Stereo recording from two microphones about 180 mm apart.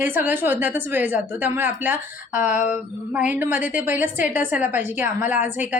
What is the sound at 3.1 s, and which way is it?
A woman's voice, 10° right (ahead or behind).